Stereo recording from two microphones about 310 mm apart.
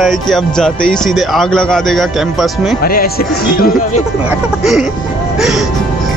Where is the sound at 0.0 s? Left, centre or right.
Centre.